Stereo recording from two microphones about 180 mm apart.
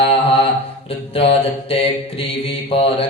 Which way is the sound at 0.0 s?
30° left (ahead or behind).